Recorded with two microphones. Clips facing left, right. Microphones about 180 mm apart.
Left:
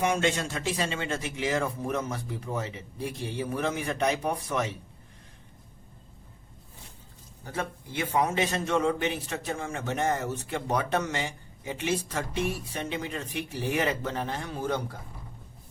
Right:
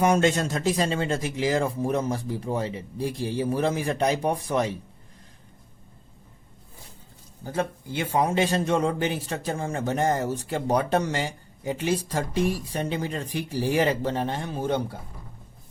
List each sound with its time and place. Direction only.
0.0 s a man's voice: 40° right (ahead or behind)
7.4 s a man's voice: 30° right (ahead or behind)